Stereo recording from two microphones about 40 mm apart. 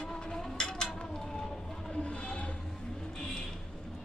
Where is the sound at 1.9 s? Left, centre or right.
Left.